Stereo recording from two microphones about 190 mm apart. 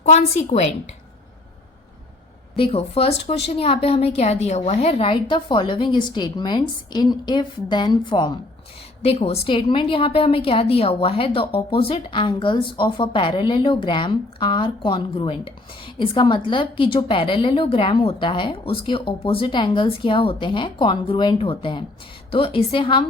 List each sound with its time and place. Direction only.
0.0 s a woman's voice: 35° left (ahead or behind)
2.6 s a woman's voice: 30° left (ahead or behind)